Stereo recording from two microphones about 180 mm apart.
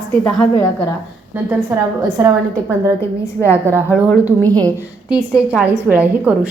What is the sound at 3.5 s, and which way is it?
Speech, 15° right (ahead or behind).